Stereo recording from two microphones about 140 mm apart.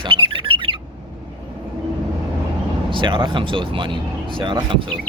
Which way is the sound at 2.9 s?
35° right (ahead or behind).